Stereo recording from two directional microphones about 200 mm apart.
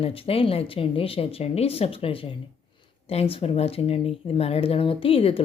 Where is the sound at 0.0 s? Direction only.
30° left (ahead or behind).